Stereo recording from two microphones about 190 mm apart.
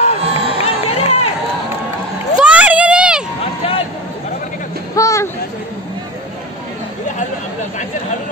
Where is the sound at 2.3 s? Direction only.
5° right (ahead or behind).